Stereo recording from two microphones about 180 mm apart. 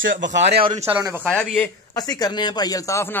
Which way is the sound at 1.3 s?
5° left (ahead or behind).